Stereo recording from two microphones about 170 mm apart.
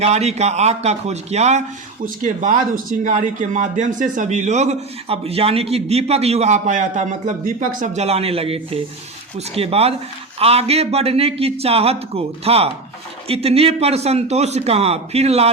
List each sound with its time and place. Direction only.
0.0 s a man's voice: 40° right (ahead or behind)